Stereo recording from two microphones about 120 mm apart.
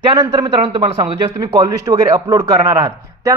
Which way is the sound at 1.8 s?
30° right (ahead or behind).